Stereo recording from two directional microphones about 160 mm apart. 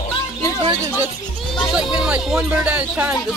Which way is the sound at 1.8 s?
5° right (ahead or behind).